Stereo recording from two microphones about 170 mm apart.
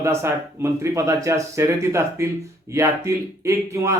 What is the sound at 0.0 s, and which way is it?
Speech, 15° right (ahead or behind).